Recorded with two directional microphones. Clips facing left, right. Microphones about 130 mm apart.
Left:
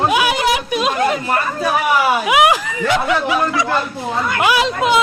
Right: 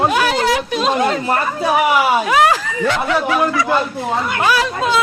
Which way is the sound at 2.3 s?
15° left (ahead or behind).